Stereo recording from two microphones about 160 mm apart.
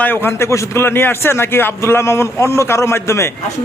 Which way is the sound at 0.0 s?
15° left (ahead or behind).